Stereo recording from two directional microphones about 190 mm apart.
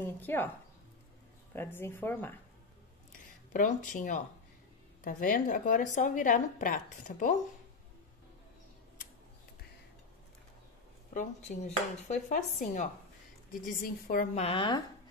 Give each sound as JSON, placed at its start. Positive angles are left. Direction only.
{"t": 0.0, "sound": "speech", "side_deg": 10}
{"t": 1.5, "sound": "speech", "side_deg": 10}
{"t": 3.1, "sound": "a sound", "side_deg": 40}
{"t": 5.0, "sound": "a woman's voice", "side_deg": 45}
{"t": 11.1, "sound": "speech", "side_deg": 40}